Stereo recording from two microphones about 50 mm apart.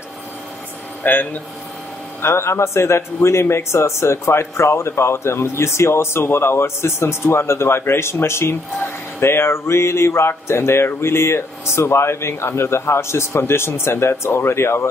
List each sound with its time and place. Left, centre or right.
1.0 s speech: left
2.2 s a man's voice: left